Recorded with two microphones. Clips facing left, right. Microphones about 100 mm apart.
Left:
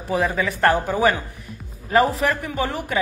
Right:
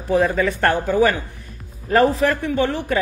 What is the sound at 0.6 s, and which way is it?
Speech, 20° left (ahead or behind).